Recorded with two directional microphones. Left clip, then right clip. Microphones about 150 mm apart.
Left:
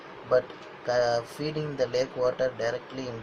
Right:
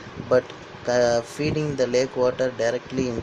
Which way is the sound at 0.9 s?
80° right.